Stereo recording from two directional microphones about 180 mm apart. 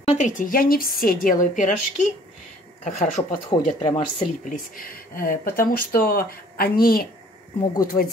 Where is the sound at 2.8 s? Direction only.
45° left (ahead or behind).